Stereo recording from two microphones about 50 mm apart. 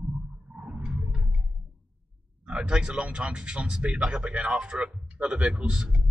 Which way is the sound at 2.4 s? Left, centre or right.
Centre.